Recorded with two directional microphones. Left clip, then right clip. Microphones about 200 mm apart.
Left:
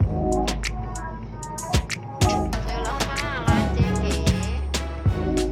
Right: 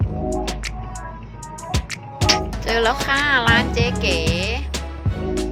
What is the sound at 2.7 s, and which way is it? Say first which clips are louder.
Music: right 9 dB; 30° right (ahead or behind).